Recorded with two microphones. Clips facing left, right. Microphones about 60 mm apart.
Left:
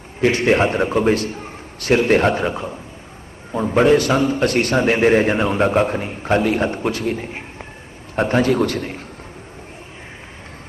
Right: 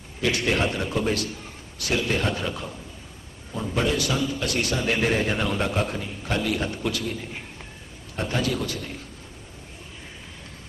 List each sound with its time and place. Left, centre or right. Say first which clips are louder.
0.2 s a man's voice: left 8 dB; left